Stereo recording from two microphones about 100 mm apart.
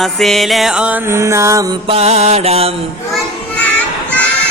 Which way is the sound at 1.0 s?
30° right (ahead or behind).